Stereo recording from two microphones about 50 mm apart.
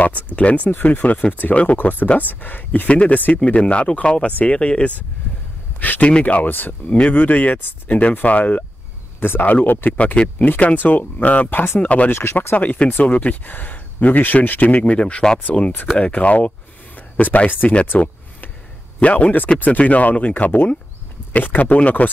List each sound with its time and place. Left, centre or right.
0.7 s speech: left
9.2 s speech: left
12.1 s speech: left
12.5 s speech: left
18.9 s speech: left